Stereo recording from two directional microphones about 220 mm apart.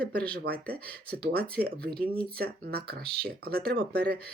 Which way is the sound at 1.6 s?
45° right (ahead or behind).